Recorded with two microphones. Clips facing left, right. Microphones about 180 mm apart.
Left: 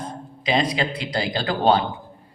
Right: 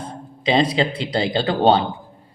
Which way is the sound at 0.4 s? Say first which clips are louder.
Right 4 dB; 25° right (ahead or behind).